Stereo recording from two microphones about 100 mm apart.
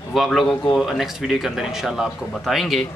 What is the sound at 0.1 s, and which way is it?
Speech, centre (ahead or behind).